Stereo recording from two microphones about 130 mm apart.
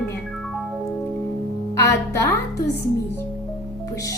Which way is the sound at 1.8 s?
25° left (ahead or behind).